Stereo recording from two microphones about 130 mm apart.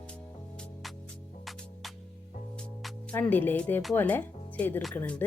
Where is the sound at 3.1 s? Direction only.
15° left (ahead or behind).